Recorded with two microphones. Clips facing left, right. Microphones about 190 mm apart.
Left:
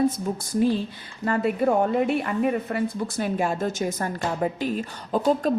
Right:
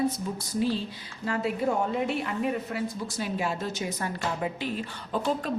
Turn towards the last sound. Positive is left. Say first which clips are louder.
# left 7 dB
turn(degrees=40)  # may be behind; listen again after turning